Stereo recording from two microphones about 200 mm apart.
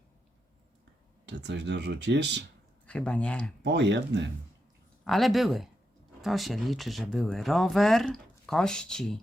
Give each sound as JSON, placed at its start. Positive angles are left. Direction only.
{"t": 1.2, "sound": "speech", "side_deg": -60}
{"t": 2.8, "sound": "speech", "side_deg": 5}
{"t": 3.6, "sound": "speech", "side_deg": -60}
{"t": 5.0, "sound": "speech", "side_deg": 0}